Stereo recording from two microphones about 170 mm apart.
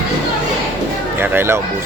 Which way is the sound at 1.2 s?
15° right (ahead or behind).